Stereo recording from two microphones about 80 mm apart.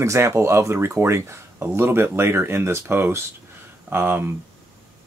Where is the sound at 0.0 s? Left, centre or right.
Right; by 4.2 s centre.